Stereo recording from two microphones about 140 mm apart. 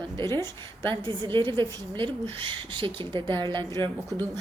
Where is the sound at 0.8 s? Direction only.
35° right (ahead or behind).